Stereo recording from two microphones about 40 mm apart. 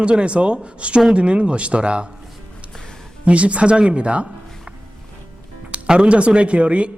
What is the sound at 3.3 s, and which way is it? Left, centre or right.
A man's voice, right.